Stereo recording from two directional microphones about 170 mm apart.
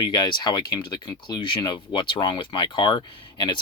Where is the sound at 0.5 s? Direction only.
25° left (ahead or behind).